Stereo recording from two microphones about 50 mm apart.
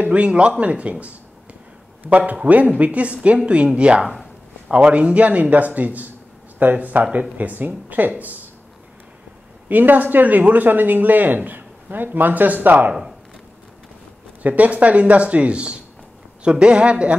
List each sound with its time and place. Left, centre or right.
0.0 s a man's voice: right
9.7 s speech: right
14.4 s a man's voice: right